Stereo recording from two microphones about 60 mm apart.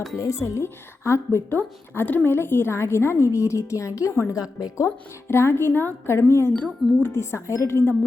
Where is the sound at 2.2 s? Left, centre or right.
Left.